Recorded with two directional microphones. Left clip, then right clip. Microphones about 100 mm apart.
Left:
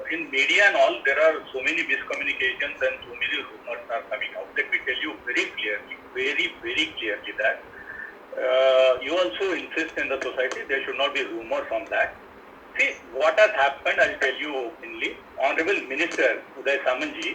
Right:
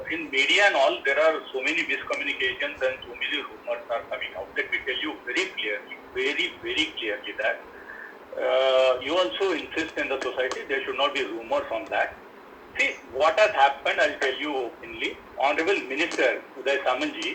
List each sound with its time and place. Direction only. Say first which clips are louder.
0.1 s a man's voice: left 1 dB; 40° right (ahead or behind)